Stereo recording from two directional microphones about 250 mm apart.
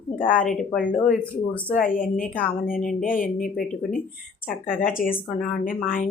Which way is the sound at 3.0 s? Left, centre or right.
Left.